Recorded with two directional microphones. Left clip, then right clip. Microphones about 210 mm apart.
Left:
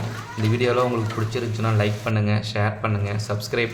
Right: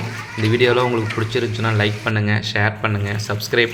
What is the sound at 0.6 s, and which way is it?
Speech, 10° right (ahead or behind).